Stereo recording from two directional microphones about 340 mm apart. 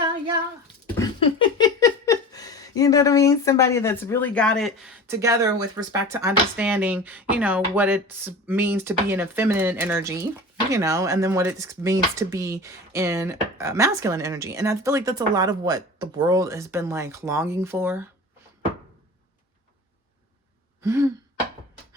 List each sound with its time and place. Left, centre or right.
0.9 s a sound: centre
10.7 s speech: centre
20.8 s speech: centre